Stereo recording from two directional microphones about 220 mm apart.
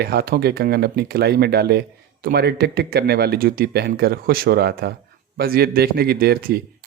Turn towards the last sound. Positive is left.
turn(degrees=-45)  # may be behind; listen again after turning